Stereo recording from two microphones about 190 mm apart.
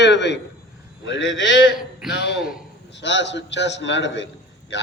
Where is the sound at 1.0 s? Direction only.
80° left.